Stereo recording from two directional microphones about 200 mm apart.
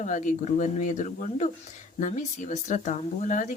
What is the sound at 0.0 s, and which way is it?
Speech, 40° left (ahead or behind).